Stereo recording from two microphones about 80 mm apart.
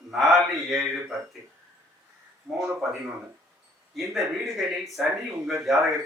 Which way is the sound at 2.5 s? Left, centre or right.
Centre.